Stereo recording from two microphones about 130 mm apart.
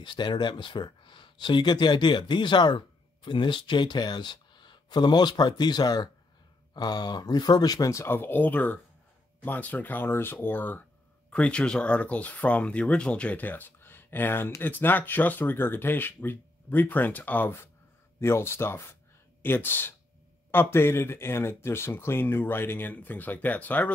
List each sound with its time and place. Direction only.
0.0 s speech: 35° left (ahead or behind); by 23.9 s 10° left (ahead or behind)